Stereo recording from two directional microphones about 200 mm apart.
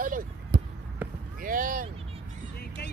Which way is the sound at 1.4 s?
45° right (ahead or behind).